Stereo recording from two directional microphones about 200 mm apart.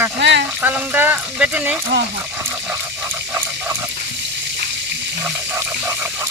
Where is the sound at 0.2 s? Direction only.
60° right (ahead or behind).